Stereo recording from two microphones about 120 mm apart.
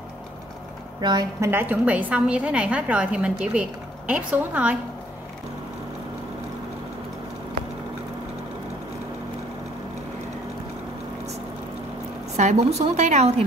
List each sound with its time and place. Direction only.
1.4 s a woman's voice: 20° right (ahead or behind)
12.4 s a woman's voice: 70° right (ahead or behind)